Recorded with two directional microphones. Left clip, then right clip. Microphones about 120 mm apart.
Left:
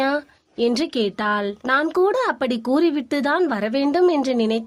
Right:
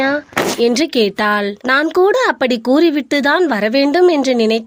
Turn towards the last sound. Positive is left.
turn(degrees=-35)  # may be behind; listen again after turning